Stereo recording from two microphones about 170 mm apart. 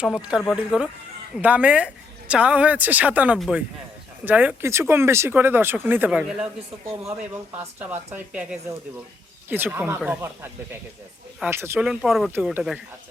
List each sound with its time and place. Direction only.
0.0 s a woman's voice: 5° right (ahead or behind)
7.6 s a woman's voice: 10° right (ahead or behind)
9.7 s a woman's voice: 10° right (ahead or behind)